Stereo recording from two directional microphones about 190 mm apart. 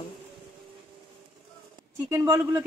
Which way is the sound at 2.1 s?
15° right (ahead or behind).